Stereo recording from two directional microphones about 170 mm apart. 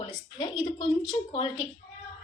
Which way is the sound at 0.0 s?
25° left (ahead or behind).